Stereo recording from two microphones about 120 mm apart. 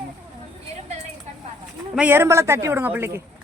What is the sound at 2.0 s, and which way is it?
A man's voice, 20° right (ahead or behind).